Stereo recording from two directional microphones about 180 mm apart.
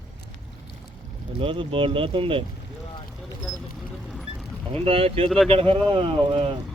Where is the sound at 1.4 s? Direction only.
30° right (ahead or behind).